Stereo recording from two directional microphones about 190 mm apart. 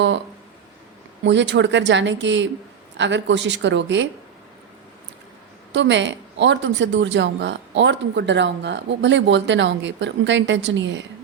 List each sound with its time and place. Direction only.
1.2 s speech: 70° right (ahead or behind)
5.7 s speech: 70° right (ahead or behind)